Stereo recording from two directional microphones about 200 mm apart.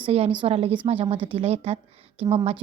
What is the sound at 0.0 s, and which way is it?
A woman's voice, 30° right (ahead or behind).